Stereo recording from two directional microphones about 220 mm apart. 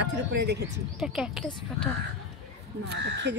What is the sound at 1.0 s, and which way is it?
Speech, centre (ahead or behind).